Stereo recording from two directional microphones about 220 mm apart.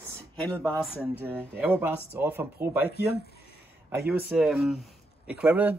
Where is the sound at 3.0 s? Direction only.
45° left (ahead or behind).